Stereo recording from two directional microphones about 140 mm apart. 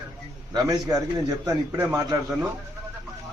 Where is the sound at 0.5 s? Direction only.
30° right (ahead or behind).